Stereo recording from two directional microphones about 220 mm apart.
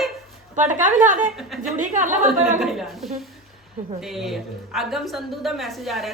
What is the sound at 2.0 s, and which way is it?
A woman's voice, centre (ahead or behind).